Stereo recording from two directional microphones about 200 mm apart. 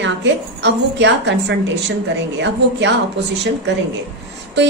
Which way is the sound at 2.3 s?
60° right (ahead or behind).